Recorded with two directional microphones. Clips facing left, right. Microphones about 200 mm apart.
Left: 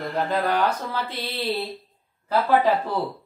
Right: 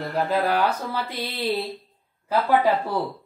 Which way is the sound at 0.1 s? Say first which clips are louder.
Right 1 dB; centre (ahead or behind).